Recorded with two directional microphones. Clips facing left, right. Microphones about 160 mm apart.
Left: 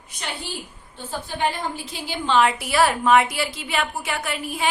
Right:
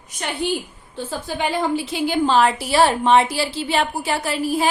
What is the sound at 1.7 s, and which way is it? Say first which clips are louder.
Speech: right 10 dB; 65° right (ahead or behind).